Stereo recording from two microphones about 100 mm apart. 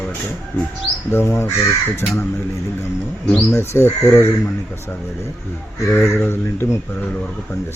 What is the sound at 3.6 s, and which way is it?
Speech, 30° left (ahead or behind).